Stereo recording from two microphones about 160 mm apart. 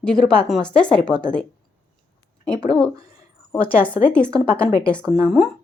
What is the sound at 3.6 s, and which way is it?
Speech, 35° left (ahead or behind).